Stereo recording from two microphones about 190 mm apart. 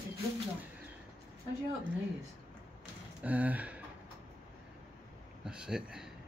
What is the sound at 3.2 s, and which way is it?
Speech, 10° right (ahead or behind).